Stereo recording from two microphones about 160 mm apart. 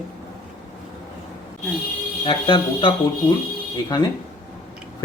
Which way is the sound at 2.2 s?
30° left (ahead or behind).